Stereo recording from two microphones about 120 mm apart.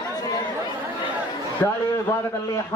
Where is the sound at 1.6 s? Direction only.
15° left (ahead or behind).